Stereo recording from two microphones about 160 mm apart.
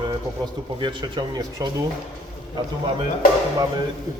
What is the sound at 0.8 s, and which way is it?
Speech, 30° right (ahead or behind).